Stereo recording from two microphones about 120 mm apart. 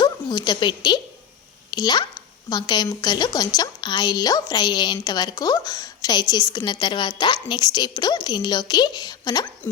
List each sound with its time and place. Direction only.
0.0 s a woman's voice: 35° left (ahead or behind)